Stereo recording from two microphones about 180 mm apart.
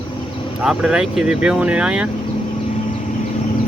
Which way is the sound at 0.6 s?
5° right (ahead or behind).